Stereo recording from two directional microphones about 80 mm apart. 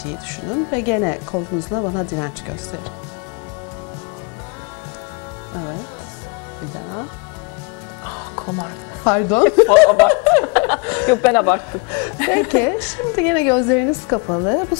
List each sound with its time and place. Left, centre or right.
0.0 s speech: centre
5.5 s speech: left
8.1 s speech: centre